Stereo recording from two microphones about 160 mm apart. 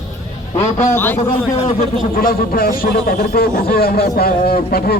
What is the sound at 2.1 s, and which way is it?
A man's voice, 65° left (ahead or behind).